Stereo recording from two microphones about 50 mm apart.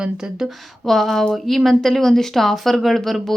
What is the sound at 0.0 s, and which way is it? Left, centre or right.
Speech, centre.